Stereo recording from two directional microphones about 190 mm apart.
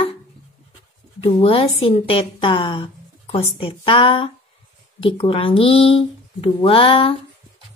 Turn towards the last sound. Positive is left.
turn(degrees=30)  # may be behind; listen again after turning